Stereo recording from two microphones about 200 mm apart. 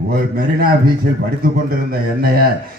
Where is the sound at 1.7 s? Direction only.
50° right (ahead or behind).